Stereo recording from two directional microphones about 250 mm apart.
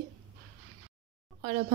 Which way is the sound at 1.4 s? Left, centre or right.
Right.